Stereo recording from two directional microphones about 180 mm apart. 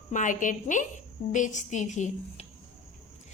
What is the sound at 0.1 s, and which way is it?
A woman's voice, 45° left (ahead or behind).